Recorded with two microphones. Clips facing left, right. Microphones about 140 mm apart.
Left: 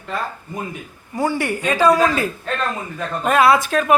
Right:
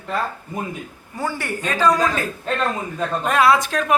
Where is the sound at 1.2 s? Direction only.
15° left (ahead or behind).